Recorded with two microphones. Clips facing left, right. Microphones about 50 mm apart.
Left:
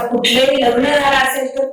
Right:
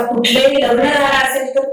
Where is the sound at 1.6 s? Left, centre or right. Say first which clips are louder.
Right 5 dB; right.